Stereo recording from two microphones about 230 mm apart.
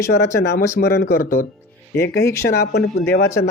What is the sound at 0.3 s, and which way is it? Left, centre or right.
Speech, left.